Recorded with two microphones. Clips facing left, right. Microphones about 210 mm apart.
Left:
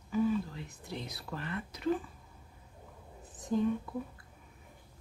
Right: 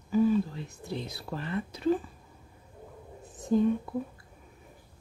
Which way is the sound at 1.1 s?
30° right (ahead or behind).